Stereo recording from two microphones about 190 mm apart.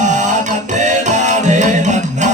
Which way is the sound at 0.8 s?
40° right (ahead or behind).